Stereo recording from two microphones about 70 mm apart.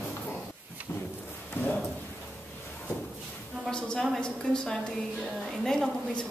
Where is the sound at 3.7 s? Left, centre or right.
Centre.